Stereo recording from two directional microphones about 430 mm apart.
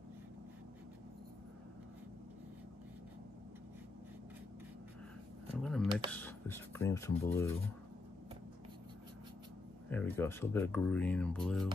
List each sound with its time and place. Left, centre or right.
5.6 s a sound: centre
6.1 s speech: centre
9.8 s speech: centre